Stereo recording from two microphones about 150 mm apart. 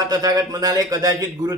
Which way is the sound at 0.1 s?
25° right (ahead or behind).